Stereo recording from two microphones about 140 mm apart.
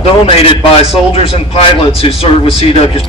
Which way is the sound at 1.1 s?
45° left (ahead or behind).